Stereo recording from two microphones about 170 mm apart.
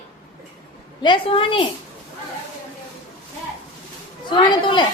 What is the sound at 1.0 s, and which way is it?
Speech, 30° left (ahead or behind).